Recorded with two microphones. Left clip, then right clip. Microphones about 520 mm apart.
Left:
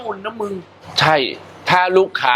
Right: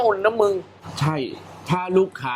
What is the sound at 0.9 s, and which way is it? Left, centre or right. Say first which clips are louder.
Speech: left 12 dB; left.